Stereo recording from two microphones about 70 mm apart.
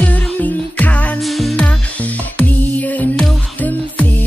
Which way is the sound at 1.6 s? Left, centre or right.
Left.